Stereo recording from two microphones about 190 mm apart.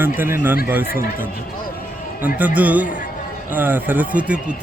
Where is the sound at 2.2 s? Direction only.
10° right (ahead or behind).